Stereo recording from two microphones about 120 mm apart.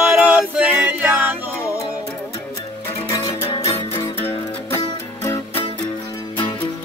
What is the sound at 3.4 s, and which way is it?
Music, 50° left (ahead or behind).